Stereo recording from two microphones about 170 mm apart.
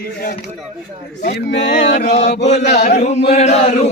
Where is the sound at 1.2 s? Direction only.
80° left.